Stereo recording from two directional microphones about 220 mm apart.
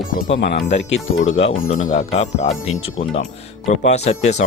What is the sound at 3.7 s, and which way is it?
Speech, 30° left (ahead or behind).